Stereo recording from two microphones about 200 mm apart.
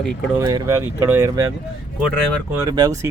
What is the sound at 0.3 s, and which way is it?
Speech, 15° right (ahead or behind).